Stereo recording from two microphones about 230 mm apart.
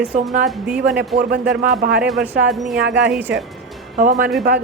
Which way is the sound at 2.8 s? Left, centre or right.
Right.